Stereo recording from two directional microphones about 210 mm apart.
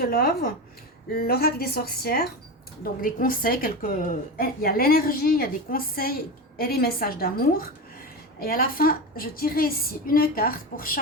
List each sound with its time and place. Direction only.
0.0 s a woman's voice: 45° left (ahead or behind)